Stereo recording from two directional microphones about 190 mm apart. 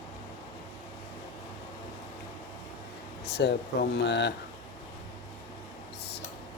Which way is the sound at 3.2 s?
60° left (ahead or behind).